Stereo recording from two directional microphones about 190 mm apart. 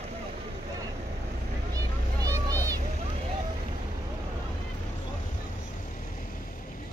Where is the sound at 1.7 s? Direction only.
20° right (ahead or behind).